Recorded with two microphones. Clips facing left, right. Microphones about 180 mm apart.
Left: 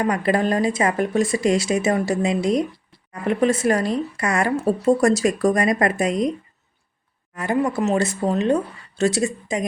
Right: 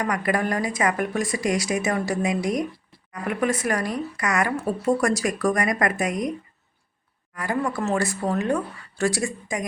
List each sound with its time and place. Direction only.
0.0 s speech: 25° left (ahead or behind)
7.3 s speech: 20° left (ahead or behind)